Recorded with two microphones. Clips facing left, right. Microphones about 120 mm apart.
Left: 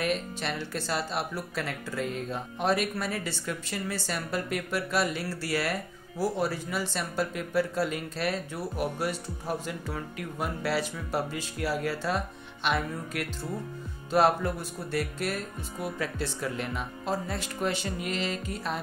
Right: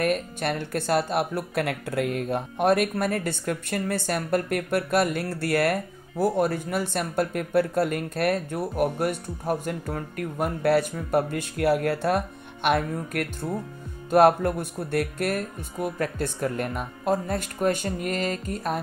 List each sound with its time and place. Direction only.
0.0 s speech: 50° right (ahead or behind)